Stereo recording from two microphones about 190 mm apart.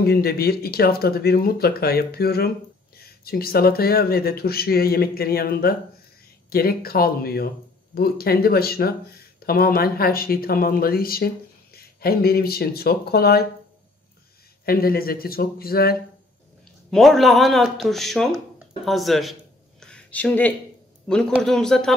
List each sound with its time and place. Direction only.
0.0 s speech: 55° left (ahead or behind)
14.6 s speech: 50° left (ahead or behind)
16.9 s speech: centre (ahead or behind)
19.8 s a sound: 5° left (ahead or behind)
21.4 s speech: centre (ahead or behind)